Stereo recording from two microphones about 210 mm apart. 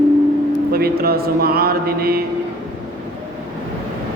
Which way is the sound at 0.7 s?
45° right (ahead or behind).